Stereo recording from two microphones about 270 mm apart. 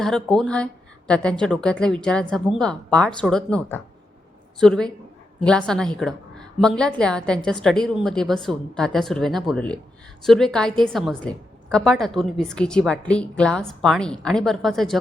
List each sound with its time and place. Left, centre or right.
0.0 s a woman's voice: centre